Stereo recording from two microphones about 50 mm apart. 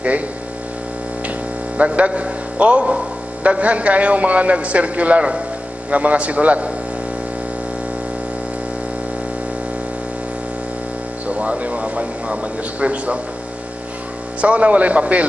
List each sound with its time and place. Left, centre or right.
1.8 s a man's voice: right
11.2 s a man's voice: right
14.4 s a man's voice: right